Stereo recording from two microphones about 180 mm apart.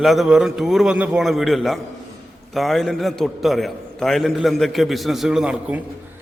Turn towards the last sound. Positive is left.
turn(degrees=-5)  # may be behind; listen again after turning